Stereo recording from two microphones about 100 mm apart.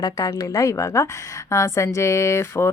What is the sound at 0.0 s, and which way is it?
A woman's voice, 35° left (ahead or behind).